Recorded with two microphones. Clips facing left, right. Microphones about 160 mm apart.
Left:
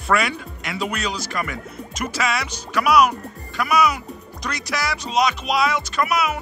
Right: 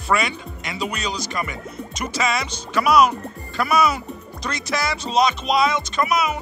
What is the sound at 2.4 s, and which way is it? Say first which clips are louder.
Speech: right 1 dB; 10° left (ahead or behind).